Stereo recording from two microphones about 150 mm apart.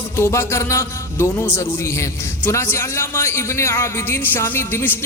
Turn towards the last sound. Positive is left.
turn(degrees=15)  # may be behind; listen again after turning